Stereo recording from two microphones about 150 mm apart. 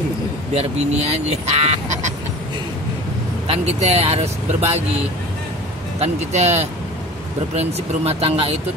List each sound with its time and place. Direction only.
0.6 s speech: 45° right (ahead or behind)
3.4 s speech: 45° right (ahead or behind)
5.9 s speech: 45° right (ahead or behind)